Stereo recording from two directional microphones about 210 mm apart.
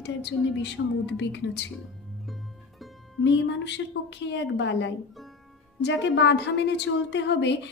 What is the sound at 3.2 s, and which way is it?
Music, 55° left (ahead or behind).